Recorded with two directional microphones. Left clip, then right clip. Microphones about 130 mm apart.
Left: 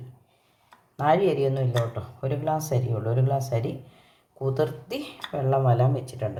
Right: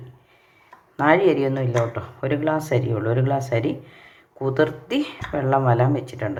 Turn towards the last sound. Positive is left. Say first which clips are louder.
# right 5 dB
turn(degrees=-10)  # may be behind; listen again after turning